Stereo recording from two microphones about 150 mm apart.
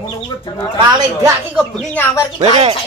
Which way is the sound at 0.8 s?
25° right (ahead or behind).